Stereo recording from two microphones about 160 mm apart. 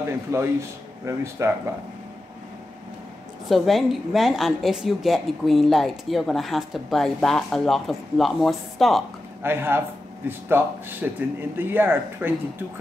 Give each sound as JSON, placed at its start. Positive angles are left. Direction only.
{"t": 0.3, "sound": "speech", "side_deg": -15}
{"t": 3.4, "sound": "a woman's voice", "side_deg": 0}
{"t": 9.4, "sound": "speech", "side_deg": -15}